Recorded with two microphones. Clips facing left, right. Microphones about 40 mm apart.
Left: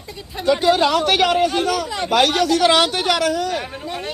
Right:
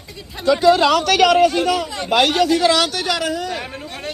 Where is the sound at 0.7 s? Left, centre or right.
Right.